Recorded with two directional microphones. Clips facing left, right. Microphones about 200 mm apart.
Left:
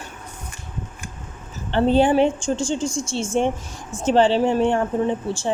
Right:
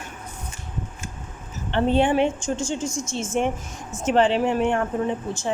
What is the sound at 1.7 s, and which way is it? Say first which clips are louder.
A woman's voice: left 3 dB; 35° left (ahead or behind).